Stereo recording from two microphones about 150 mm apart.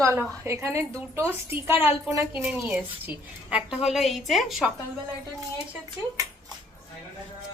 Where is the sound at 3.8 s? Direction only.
Centre (ahead or behind).